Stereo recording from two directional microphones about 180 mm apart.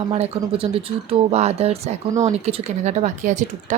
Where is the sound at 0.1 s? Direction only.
30° right (ahead or behind).